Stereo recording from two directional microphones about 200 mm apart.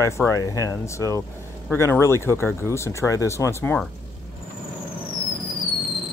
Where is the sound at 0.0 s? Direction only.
15° left (ahead or behind).